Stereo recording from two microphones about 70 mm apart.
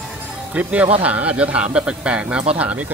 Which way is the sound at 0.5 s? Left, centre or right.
Right.